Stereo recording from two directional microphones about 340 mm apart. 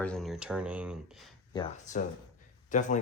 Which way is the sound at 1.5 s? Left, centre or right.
Centre.